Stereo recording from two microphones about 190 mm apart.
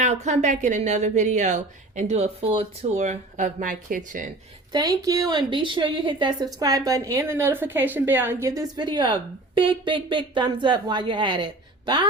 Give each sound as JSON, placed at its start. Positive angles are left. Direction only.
{"t": 0.0, "sound": "a woman's voice", "side_deg": -35}
{"t": 3.0, "sound": "speech", "side_deg": -40}
{"t": 4.7, "sound": "a woman's voice", "side_deg": -20}